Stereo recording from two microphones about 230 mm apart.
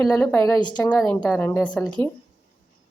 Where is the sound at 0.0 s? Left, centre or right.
Centre.